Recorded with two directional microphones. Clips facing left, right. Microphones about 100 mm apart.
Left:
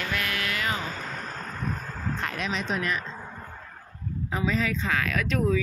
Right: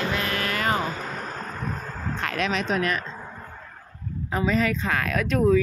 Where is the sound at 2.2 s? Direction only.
80° right.